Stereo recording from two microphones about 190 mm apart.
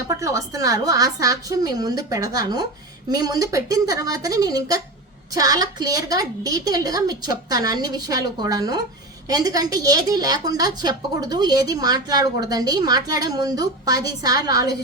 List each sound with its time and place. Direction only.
0.1 s a woman's voice: 15° right (ahead or behind)